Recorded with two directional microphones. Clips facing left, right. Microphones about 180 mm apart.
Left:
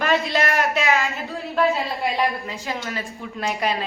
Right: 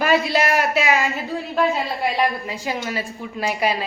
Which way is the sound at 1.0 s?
20° right (ahead or behind).